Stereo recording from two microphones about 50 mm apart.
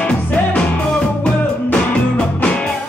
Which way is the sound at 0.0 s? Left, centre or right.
Left.